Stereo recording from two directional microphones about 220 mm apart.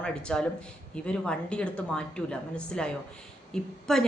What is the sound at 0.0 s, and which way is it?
Speech, 5° left (ahead or behind).